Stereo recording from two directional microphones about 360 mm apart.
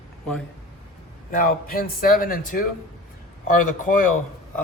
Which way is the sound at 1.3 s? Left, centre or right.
Left.